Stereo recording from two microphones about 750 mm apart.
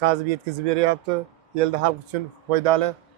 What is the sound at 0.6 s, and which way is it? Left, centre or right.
Speech, right.